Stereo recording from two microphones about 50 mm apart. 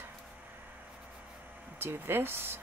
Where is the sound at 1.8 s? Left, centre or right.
Right.